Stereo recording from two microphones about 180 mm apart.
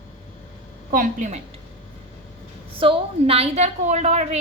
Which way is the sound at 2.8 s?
30° right (ahead or behind).